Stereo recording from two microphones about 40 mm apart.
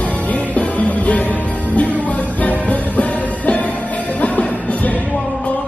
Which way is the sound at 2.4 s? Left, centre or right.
Left.